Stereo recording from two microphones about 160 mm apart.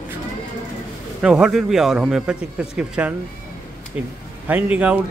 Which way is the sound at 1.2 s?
5° right (ahead or behind).